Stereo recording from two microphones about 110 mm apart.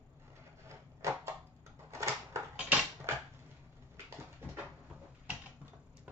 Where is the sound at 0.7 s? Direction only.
25° right (ahead or behind).